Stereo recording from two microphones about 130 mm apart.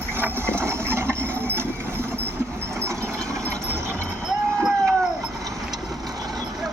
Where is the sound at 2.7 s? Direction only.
20° right (ahead or behind).